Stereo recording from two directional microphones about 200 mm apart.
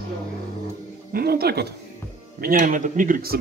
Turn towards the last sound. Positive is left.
turn(degrees=-45)  # may be behind; listen again after turning